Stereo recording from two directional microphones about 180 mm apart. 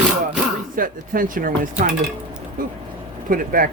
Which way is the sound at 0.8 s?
50° right (ahead or behind).